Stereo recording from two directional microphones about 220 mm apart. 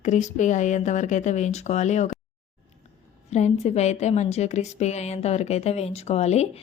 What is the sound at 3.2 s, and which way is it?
A woman's voice, 30° left (ahead or behind).